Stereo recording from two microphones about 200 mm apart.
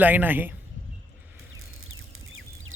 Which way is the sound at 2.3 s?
85° right.